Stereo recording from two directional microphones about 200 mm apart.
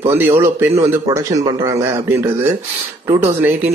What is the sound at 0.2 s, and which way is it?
Speech, 10° right (ahead or behind).